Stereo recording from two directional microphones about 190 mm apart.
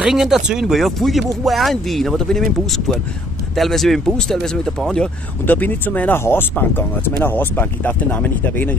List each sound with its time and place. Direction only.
0.0 s speech: centre (ahead or behind)